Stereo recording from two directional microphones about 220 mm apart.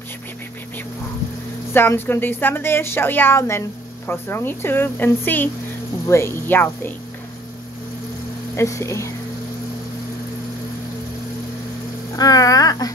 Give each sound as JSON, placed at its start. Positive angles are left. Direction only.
{"t": 1.7, "sound": "a woman's voice", "side_deg": 10}
{"t": 8.5, "sound": "a woman's voice", "side_deg": 15}
{"t": 12.2, "sound": "a woman's voice", "side_deg": 15}